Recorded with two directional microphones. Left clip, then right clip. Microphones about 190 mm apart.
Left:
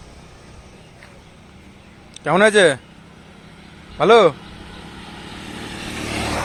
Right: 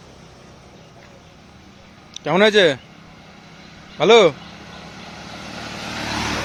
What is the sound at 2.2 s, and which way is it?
Speech, 10° right (ahead or behind).